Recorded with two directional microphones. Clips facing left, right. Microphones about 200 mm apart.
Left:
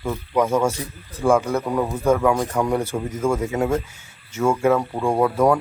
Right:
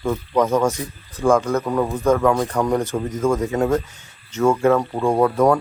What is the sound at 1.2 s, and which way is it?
A man's voice, 10° left (ahead or behind).